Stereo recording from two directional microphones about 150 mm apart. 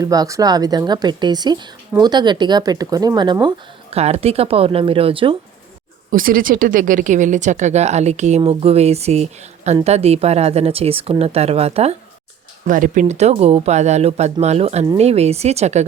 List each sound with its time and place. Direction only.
0.0 s speech: 25° right (ahead or behind)
3.4 s speech: 40° right (ahead or behind)
6.1 s speech: 70° right (ahead or behind); by 11.9 s 45° right (ahead or behind)
12.6 s speech: 60° right (ahead or behind)